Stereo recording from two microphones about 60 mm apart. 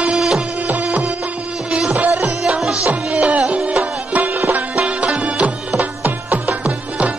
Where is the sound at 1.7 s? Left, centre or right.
Centre.